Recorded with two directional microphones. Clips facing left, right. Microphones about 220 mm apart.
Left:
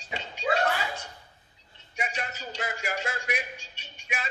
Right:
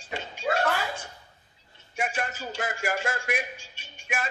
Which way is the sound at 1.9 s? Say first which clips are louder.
Right 4 dB; 50° right (ahead or behind).